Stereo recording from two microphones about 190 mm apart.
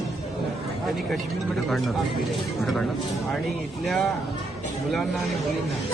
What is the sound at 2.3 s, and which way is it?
Speech, centre (ahead or behind).